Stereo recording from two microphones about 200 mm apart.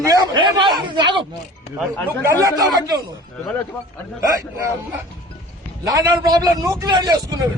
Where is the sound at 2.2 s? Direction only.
15° right (ahead or behind).